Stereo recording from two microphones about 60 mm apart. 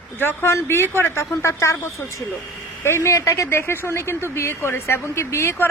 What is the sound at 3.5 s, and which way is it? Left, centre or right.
A woman's voice, left.